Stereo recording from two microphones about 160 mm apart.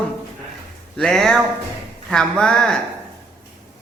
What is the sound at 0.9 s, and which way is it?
Speech, 5° left (ahead or behind).